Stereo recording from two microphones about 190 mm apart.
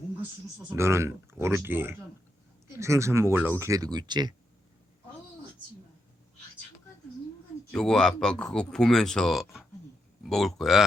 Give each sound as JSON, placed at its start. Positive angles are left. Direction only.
{"t": 0.7, "sound": "speech", "side_deg": -15}
{"t": 7.7, "sound": "speech", "side_deg": 5}